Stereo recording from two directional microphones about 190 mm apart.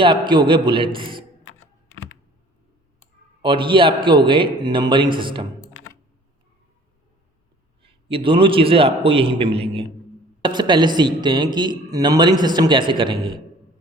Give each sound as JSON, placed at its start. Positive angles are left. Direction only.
{"t": 0.0, "sound": "a man's voice", "side_deg": -25}
{"t": 3.4, "sound": "a man's voice", "side_deg": -25}
{"t": 7.8, "sound": "a man's voice", "side_deg": -30}